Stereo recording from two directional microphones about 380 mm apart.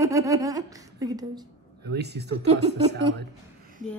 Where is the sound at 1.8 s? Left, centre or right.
Right.